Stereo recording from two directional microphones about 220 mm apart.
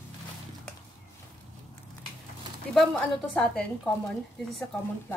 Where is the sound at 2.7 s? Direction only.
5° left (ahead or behind).